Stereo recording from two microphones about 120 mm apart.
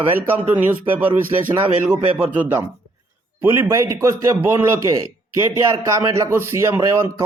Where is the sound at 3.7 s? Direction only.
25° right (ahead or behind).